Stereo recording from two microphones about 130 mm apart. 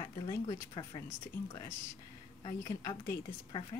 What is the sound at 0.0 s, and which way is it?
Speech, 30° left (ahead or behind).